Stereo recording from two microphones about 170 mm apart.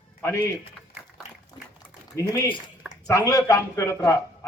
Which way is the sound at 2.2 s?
15° left (ahead or behind).